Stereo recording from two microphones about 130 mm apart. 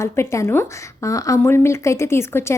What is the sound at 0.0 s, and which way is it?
A woman's voice, 20° left (ahead or behind).